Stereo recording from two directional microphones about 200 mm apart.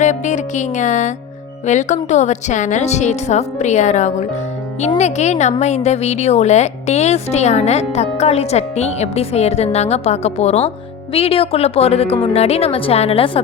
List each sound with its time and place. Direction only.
0.0 s a woman's voice: 35° left (ahead or behind)